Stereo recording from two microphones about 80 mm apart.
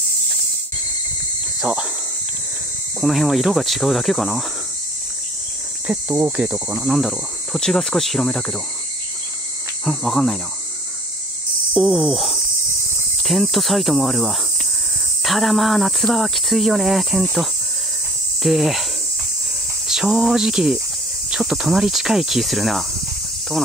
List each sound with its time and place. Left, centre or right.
1.6 s cricket: centre
3.0 s speech: centre
5.9 s cricket: right
6.8 s speech: centre
9.8 s speech: centre
11.7 s cricket: centre
13.2 s speech: centre
18.4 s cricket: centre
19.9 s speech: centre